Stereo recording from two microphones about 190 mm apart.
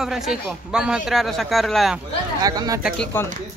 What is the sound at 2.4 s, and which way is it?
Speech, 20° right (ahead or behind).